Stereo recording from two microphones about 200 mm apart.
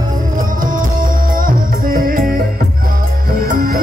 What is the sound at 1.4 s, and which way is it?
Music, 45° right (ahead or behind).